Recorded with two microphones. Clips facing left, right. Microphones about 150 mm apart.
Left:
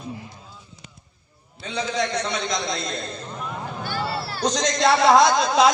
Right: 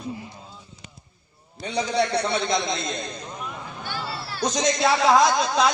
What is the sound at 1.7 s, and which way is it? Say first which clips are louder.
A man's voice: right 2 dB; 35° right (ahead or behind).